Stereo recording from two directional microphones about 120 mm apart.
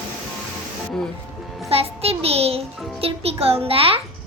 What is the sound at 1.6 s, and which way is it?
Speech, 55° right (ahead or behind).